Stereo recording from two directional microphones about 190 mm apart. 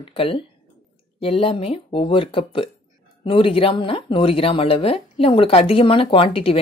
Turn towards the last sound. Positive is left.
turn(degrees=30)  # may be behind; listen again after turning